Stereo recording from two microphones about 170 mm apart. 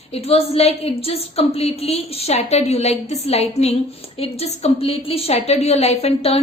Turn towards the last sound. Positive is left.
turn(degrees=35)  # may be behind; listen again after turning